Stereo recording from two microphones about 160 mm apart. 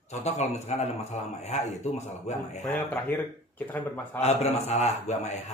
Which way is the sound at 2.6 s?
15° left (ahead or behind).